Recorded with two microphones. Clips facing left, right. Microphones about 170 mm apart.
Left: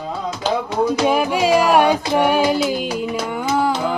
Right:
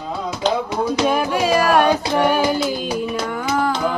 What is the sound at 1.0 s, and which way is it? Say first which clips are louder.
Music: left 1 dB; 15° left (ahead or behind).